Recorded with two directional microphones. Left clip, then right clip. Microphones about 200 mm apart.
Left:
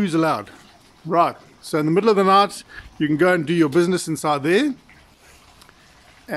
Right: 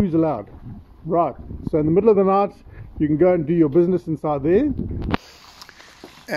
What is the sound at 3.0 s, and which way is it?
Speech, 45° left (ahead or behind).